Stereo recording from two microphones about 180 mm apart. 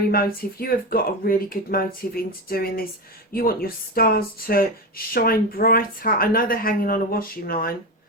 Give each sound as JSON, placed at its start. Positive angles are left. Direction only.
{"t": 0.1, "sound": "speech", "side_deg": 55}